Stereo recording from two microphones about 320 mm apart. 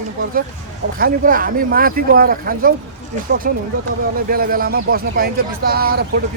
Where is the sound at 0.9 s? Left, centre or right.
Right.